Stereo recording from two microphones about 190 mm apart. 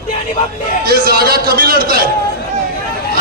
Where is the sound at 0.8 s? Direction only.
55° right (ahead or behind).